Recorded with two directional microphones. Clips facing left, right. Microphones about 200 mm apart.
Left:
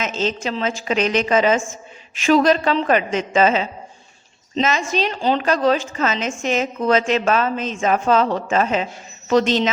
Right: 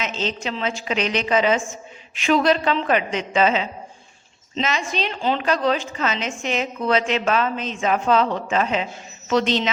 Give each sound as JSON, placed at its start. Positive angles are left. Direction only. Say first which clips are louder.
{"t": 0.0, "sound": "a woman's voice", "louder": "left 4 dB", "side_deg": 45}